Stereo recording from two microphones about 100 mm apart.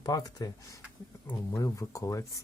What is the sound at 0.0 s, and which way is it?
Speech, 40° left (ahead or behind).